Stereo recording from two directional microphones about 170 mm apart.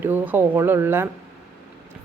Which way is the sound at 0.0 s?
10° right (ahead or behind).